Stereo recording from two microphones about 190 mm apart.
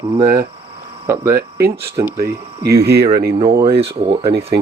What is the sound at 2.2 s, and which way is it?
Speech, 55° right (ahead or behind).